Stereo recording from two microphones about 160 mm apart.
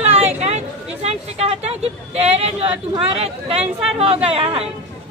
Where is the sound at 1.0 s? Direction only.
40° right (ahead or behind).